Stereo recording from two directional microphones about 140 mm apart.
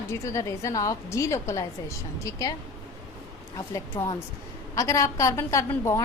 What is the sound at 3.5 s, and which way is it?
A woman's voice, 20° left (ahead or behind).